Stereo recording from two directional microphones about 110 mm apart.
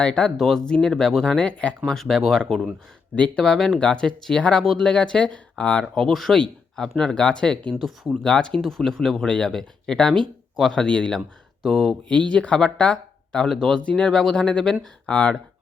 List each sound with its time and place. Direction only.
0.0 s speech: 10° left (ahead or behind)